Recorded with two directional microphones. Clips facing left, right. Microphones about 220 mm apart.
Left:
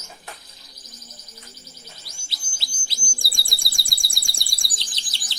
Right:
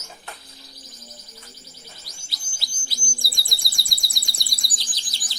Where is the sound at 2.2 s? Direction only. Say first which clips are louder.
Even; 25° left (ahead or behind).